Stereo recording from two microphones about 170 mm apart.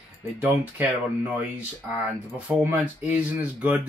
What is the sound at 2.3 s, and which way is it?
Speech, 10° right (ahead or behind).